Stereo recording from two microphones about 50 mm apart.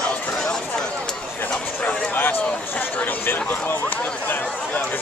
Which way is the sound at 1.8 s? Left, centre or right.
Left.